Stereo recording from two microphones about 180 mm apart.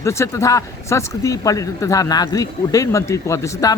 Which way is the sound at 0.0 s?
15° left (ahead or behind).